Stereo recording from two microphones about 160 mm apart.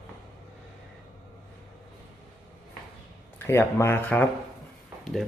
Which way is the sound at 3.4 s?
15° left (ahead or behind).